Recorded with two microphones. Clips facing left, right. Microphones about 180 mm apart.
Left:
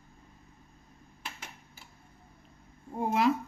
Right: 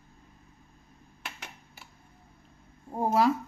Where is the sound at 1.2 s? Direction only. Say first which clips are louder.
Right 1 dB; 70° right (ahead or behind).